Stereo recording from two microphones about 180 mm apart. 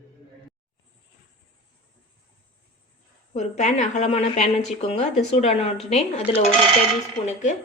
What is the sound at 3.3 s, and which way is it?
A woman's voice, 40° left (ahead or behind).